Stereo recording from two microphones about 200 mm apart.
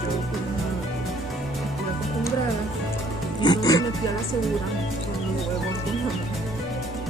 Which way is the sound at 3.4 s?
20° left (ahead or behind).